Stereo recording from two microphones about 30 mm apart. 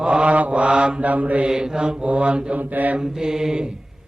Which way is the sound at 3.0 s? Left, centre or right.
Right.